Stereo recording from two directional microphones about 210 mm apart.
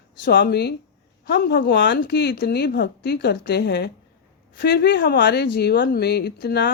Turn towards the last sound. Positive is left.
turn(degrees=55)  # may be behind; listen again after turning